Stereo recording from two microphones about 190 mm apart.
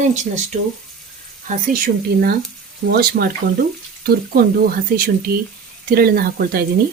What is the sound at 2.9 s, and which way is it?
Speech, 55° right (ahead or behind).